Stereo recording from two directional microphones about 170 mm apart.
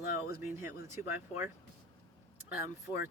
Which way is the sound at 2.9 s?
20° left (ahead or behind).